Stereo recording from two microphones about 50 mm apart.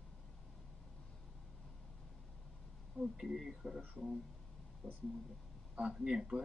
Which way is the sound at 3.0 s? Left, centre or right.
Centre.